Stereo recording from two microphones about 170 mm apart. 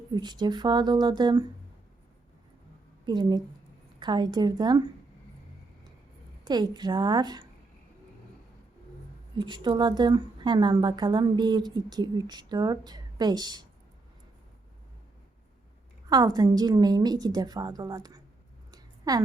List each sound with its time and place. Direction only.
0.1 s a woman's voice: 25° right (ahead or behind)
3.1 s a woman's voice: 25° right (ahead or behind)
6.4 s a woman's voice: 25° right (ahead or behind)
9.4 s a woman's voice: 25° right (ahead or behind)
16.0 s a woman's voice: 25° right (ahead or behind)
18.7 s a sound: 20° right (ahead or behind)